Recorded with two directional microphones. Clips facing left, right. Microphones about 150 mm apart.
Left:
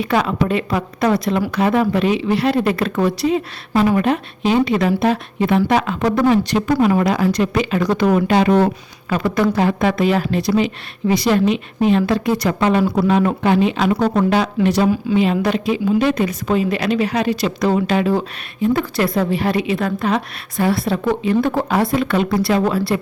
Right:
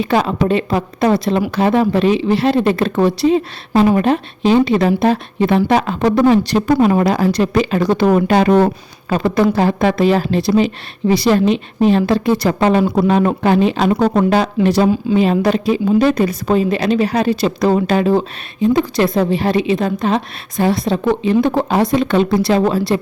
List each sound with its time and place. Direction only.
0.0 s a woman's voice: 30° right (ahead or behind)
9.0 s speech: 30° right (ahead or behind)
18.6 s a woman's voice: 20° right (ahead or behind)